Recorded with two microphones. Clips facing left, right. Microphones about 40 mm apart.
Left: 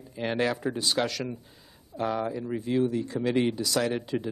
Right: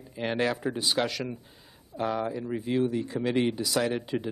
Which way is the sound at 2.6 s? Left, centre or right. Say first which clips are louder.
Left 1 dB; centre.